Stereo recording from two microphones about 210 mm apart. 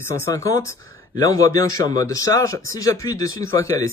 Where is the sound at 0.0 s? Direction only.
15° left (ahead or behind).